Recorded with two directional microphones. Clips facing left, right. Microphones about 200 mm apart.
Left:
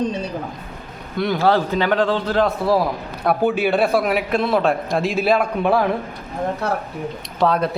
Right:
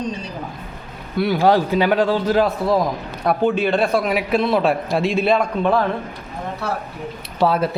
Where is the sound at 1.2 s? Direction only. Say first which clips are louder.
Right 2 dB; 10° right (ahead or behind).